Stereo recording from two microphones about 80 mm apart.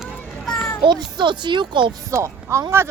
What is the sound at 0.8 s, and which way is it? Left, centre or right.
Speech, right.